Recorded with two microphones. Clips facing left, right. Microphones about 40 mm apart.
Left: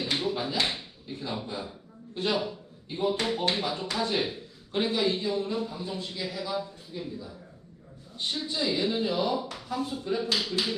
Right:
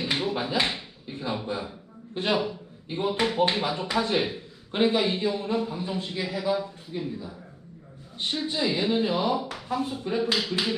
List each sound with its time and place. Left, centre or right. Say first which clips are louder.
0.2 s a sound: right 2 dB; right
2.1 s speech: right 3 dB; right
8.6 s speech: right 2 dB; right